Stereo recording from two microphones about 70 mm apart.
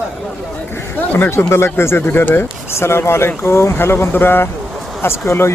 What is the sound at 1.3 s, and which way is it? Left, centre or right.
Speech, left.